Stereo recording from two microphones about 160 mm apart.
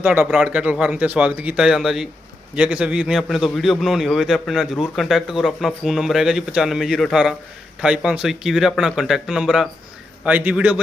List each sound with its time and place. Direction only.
0.0 s a man's voice: 10° right (ahead or behind)